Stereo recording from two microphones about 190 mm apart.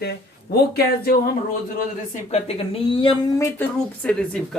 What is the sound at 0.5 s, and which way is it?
Speech, 55° left (ahead or behind).